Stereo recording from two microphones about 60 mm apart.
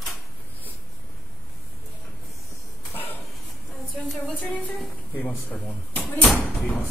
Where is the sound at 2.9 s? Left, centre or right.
Left.